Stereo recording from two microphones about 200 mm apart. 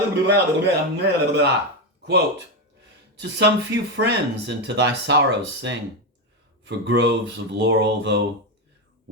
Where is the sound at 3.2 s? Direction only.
60° right (ahead or behind).